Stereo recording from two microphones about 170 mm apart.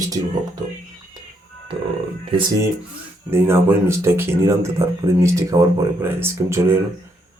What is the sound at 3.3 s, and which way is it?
Speech, 15° right (ahead or behind).